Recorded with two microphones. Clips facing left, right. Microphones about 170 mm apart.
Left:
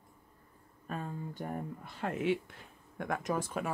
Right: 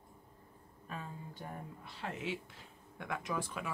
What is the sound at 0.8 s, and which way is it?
Speech, 50° left (ahead or behind).